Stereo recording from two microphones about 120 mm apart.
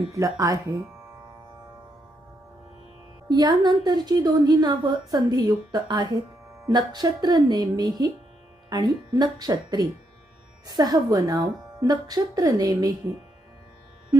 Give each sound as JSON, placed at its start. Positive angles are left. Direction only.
{"t": 0.1, "sound": "speech", "side_deg": -30}
{"t": 3.2, "sound": "a woman's voice", "side_deg": -35}